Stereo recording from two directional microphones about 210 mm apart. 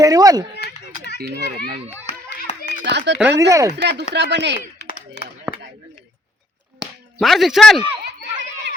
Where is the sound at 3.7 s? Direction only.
50° right (ahead or behind).